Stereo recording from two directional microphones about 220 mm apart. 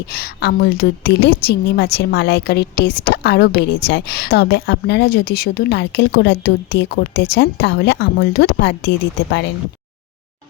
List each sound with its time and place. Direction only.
0.1 s a woman's voice: 45° left (ahead or behind)